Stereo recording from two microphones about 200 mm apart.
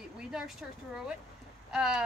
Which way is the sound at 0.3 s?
Centre (ahead or behind).